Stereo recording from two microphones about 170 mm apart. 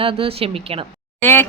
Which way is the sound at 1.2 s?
15° left (ahead or behind).